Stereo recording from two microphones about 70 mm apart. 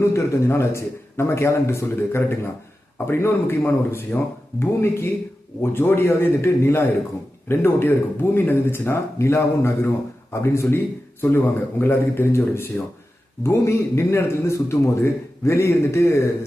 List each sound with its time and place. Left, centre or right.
0.0 s a man's voice: left